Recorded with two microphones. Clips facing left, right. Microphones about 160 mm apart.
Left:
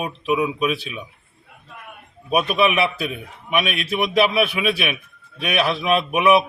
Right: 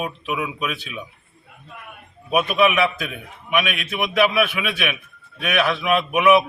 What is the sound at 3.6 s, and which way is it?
A man's voice, 35° left (ahead or behind).